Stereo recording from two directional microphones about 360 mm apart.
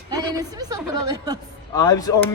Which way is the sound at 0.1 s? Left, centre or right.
Centre.